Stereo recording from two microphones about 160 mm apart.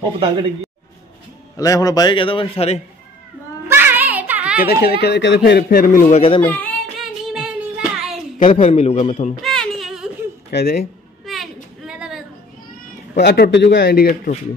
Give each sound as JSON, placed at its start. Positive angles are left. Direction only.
{"t": 1.6, "sound": "a man's voice", "side_deg": 20}
{"t": 3.6, "sound": "music", "side_deg": -15}
{"t": 4.6, "sound": "speech", "side_deg": 80}
{"t": 6.4, "sound": "speech", "side_deg": 10}
{"t": 7.0, "sound": "child singing", "side_deg": -5}
{"t": 8.4, "sound": "a man's voice", "side_deg": 50}
{"t": 9.4, "sound": "a sound", "side_deg": 5}
{"t": 10.5, "sound": "speech", "side_deg": 75}
{"t": 11.2, "sound": "a sound", "side_deg": 0}
{"t": 13.1, "sound": "a man's voice", "side_deg": 90}